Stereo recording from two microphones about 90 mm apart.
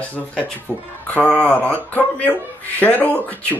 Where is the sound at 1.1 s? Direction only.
10° left (ahead or behind).